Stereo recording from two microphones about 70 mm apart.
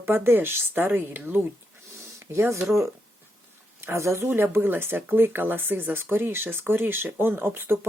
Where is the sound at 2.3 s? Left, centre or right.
Right.